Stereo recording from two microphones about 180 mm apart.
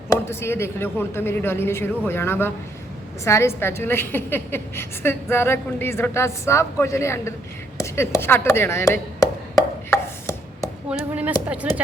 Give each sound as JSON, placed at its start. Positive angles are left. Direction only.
{"t": 0.1, "sound": "a woman's voice", "side_deg": 15}
{"t": 9.9, "sound": "chopping", "side_deg": 15}
{"t": 10.8, "sound": "speech", "side_deg": -10}